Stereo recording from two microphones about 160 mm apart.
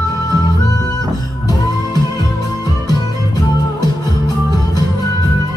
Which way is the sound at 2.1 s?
25° left (ahead or behind).